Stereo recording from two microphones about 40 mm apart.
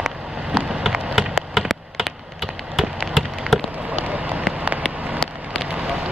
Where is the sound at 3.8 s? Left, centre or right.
Right.